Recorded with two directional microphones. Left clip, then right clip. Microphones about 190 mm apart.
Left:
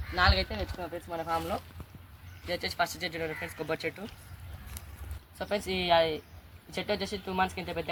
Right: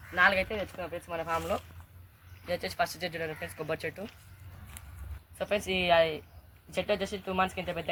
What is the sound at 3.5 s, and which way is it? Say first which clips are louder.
Speech: left 1 dB; 45° right (ahead or behind).